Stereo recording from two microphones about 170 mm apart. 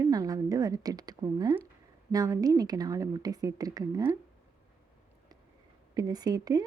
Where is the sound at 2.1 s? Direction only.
20° right (ahead or behind).